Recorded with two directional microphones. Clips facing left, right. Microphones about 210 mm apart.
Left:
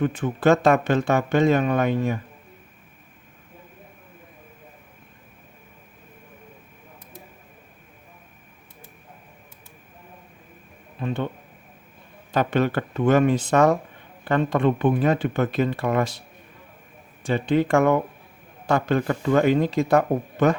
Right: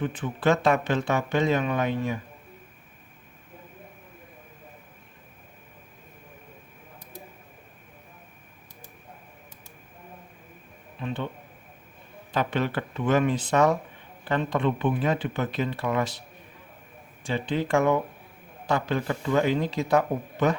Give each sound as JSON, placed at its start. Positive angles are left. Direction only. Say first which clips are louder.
{"t": 0.0, "sound": "speech", "louder": "left 5 dB", "side_deg": 45}
{"t": 11.0, "sound": "speech", "louder": "left 5 dB", "side_deg": 45}
{"t": 12.3, "sound": "speech", "louder": "left 5 dB", "side_deg": 45}
{"t": 17.2, "sound": "speech", "louder": "left 6 dB", "side_deg": 50}